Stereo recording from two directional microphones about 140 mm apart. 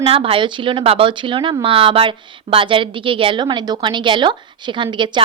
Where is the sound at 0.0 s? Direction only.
40° right (ahead or behind).